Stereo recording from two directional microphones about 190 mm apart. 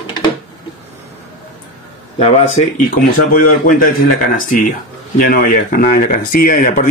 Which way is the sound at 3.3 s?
45° left (ahead or behind).